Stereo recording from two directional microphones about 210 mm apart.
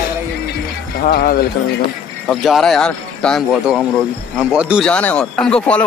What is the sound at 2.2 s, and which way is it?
Speech, centre (ahead or behind).